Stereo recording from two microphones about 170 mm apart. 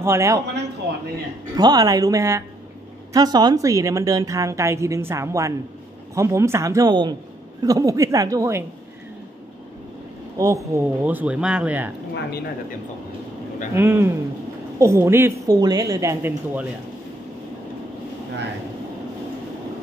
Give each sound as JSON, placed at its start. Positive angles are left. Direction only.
{"t": 0.0, "sound": "a woman's voice", "side_deg": -15}
{"t": 1.5, "sound": "a woman's voice", "side_deg": -25}
{"t": 10.3, "sound": "a woman's voice", "side_deg": -20}
{"t": 12.1, "sound": "speech", "side_deg": 70}
{"t": 13.7, "sound": "a woman's voice", "side_deg": -15}